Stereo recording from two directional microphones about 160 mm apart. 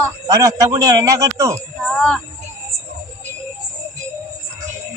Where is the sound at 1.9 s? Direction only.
5° left (ahead or behind).